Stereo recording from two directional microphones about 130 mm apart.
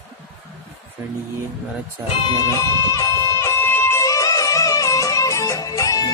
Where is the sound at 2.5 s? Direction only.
25° left (ahead or behind).